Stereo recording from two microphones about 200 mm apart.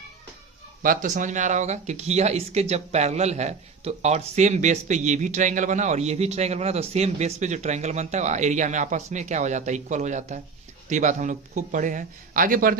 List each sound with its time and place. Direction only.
0.8 s speech: 40° right (ahead or behind)